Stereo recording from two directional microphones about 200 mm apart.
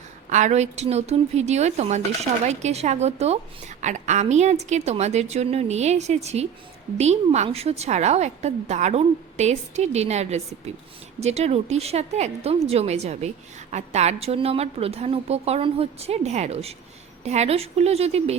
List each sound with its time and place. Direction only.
0.3 s a woman's voice: 35° right (ahead or behind)